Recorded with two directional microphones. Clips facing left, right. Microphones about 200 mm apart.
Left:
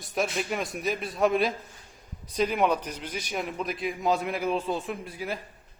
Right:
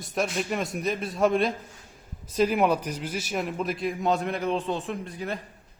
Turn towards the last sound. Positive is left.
turn(degrees=5)  # may be behind; listen again after turning